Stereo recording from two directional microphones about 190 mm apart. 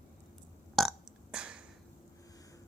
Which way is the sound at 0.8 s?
5° right (ahead or behind).